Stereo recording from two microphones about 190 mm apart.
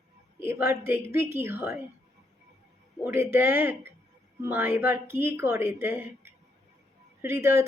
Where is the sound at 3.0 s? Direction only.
10° right (ahead or behind).